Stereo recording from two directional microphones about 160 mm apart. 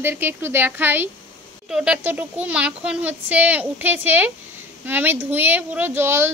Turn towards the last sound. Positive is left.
turn(degrees=-15)  # may be behind; listen again after turning